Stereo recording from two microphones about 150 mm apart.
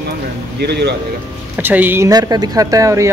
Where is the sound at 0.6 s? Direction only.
90° right.